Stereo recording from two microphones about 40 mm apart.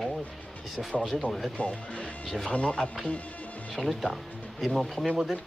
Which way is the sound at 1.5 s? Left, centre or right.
Left.